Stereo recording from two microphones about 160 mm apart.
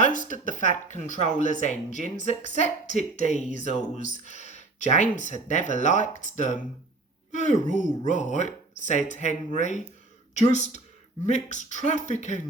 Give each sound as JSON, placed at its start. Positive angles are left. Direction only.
{"t": 0.0, "sound": "speech", "side_deg": 55}